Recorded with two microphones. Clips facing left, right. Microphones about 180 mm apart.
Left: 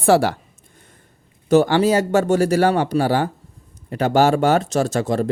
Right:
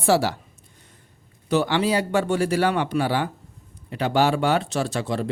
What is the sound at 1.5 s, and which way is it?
Speech, 45° left (ahead or behind).